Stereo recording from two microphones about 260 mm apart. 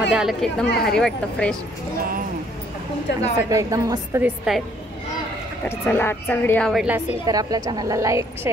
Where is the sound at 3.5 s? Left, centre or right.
Centre.